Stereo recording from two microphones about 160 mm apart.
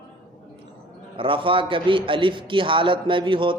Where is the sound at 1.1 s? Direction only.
35° right (ahead or behind).